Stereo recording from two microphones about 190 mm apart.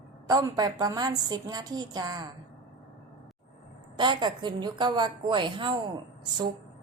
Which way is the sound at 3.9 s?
25° right (ahead or behind).